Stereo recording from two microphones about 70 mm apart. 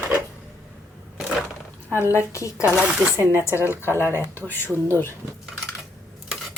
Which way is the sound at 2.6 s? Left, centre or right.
Centre.